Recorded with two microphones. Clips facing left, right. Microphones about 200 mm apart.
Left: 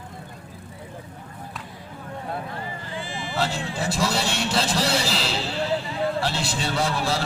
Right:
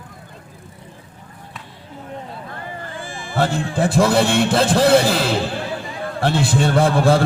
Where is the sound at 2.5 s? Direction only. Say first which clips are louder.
Right 1 dB; 50° right (ahead or behind).